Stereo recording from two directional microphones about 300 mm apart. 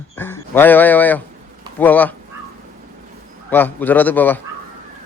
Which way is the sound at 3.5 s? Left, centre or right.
Centre.